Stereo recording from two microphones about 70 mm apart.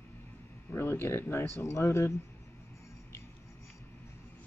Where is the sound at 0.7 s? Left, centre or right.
Left.